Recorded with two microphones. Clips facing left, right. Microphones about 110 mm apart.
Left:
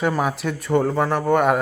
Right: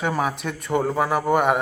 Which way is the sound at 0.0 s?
Centre (ahead or behind).